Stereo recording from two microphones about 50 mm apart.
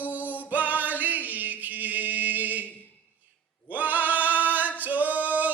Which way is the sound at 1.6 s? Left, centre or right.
Right.